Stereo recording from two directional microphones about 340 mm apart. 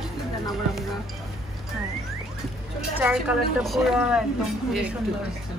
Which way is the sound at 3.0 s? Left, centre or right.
Centre.